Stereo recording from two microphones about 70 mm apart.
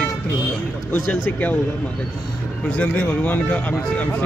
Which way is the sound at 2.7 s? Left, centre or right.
Left.